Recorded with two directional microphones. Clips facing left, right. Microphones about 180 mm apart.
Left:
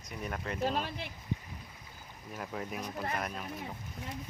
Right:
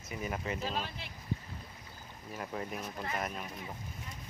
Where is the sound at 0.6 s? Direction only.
50° left (ahead or behind).